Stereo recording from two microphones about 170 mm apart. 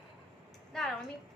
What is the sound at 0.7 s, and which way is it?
Speech, 5° left (ahead or behind).